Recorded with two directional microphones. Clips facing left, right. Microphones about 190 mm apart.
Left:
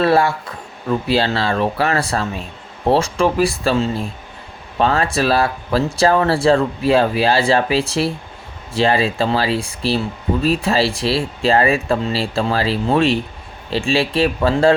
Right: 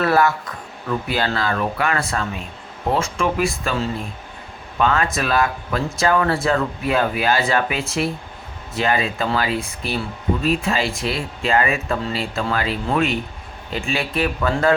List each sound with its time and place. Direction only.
0.0 s speech: 30° left (ahead or behind)